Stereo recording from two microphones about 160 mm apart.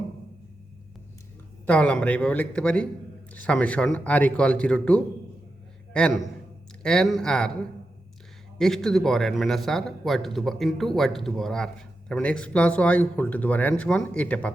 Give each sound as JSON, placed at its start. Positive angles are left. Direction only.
{"t": 1.6, "sound": "a man's voice", "side_deg": 10}
{"t": 8.5, "sound": "a man's voice", "side_deg": 0}